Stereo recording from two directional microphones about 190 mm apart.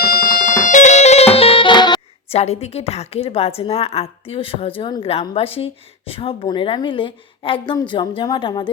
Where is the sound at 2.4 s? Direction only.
35° left (ahead or behind).